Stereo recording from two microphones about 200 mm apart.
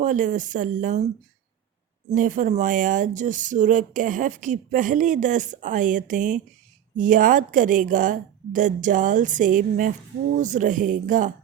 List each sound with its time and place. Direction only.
0.0 s speech: 40° right (ahead or behind)
2.1 s speech: 40° right (ahead or behind)